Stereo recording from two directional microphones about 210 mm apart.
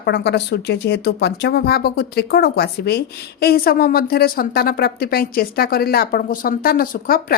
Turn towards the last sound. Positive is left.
turn(degrees=45)  # may be behind; listen again after turning